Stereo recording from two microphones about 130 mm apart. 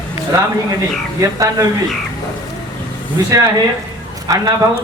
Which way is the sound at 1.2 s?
25° right (ahead or behind).